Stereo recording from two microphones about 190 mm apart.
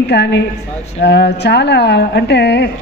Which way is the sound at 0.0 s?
60° left (ahead or behind).